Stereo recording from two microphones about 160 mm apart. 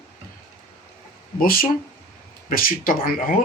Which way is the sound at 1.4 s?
65° left (ahead or behind).